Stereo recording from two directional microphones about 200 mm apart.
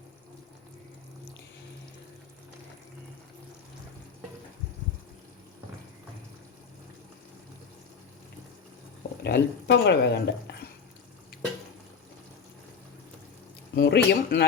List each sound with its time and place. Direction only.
9.2 s speech: 55° left (ahead or behind)
13.7 s speech: 55° left (ahead or behind)